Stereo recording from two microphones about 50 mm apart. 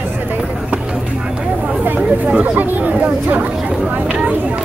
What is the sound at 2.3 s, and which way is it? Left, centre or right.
Chatter, right.